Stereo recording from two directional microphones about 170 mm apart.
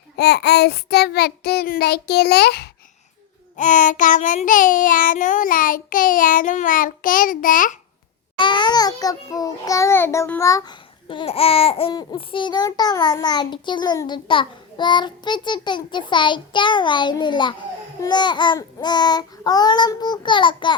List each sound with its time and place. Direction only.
0.2 s child singing: 75° left (ahead or behind)
3.6 s child singing: 50° left (ahead or behind)
8.4 s a child's voice: 25° left (ahead or behind)